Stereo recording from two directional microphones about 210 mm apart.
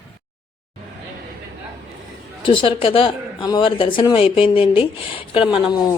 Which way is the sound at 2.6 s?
25° left (ahead or behind).